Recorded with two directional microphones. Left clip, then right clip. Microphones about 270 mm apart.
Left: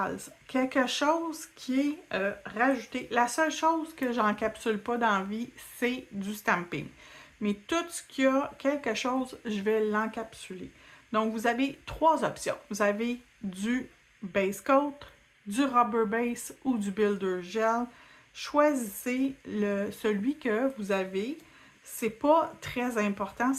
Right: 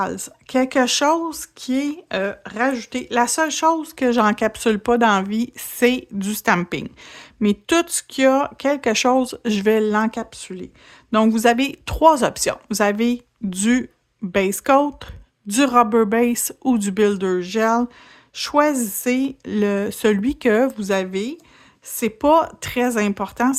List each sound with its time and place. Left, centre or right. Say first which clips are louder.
0.0 s speech: right 9 dB; right